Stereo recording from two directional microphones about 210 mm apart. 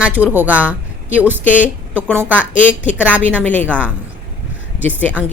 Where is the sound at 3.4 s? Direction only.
5° left (ahead or behind).